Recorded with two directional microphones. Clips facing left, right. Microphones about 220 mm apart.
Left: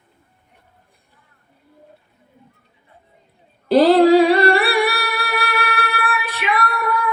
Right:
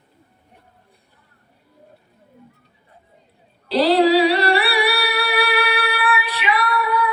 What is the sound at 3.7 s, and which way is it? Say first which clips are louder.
Singing: left 4 dB; 50° left (ahead or behind).